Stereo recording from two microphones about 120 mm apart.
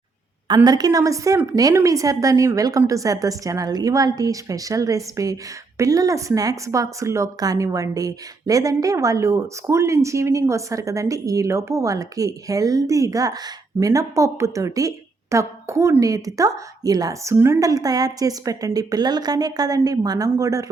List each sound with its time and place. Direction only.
0.4 s a woman's voice: 35° right (ahead or behind)